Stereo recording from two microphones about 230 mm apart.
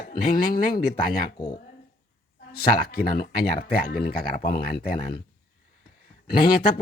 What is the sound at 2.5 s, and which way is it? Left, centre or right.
Speech, left.